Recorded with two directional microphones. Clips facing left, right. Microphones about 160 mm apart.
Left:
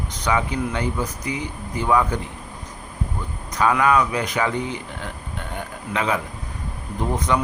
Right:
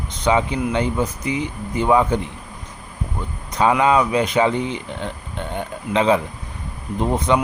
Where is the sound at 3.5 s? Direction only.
25° right (ahead or behind).